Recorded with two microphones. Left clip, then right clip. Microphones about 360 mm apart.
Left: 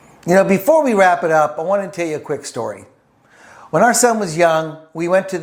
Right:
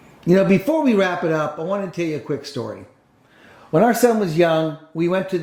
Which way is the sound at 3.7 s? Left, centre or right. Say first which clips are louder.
Left 3 dB; left.